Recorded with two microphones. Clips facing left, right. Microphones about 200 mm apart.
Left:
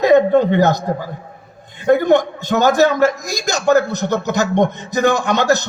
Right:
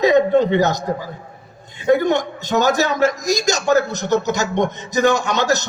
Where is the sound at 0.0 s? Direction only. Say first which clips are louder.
Left 2 dB; 55° left (ahead or behind).